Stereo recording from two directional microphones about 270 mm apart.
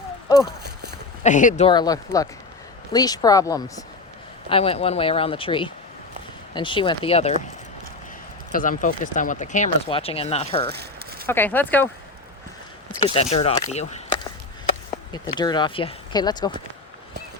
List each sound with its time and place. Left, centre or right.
0.6 s a sound: right
1.2 s speech: left
8.5 s speech: left
10.7 s a sound: right
11.3 s speech: centre
13.0 s speech: left